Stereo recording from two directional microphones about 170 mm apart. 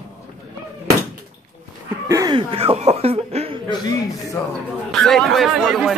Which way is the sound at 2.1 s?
20° right (ahead or behind).